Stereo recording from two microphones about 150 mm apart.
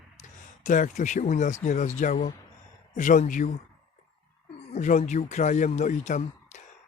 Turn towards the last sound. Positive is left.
turn(degrees=55)  # may be behind; listen again after turning